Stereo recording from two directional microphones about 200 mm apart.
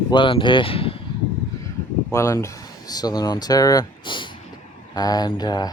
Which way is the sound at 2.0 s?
15° left (ahead or behind).